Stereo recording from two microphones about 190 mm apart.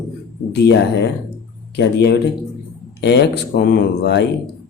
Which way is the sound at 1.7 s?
60° left (ahead or behind).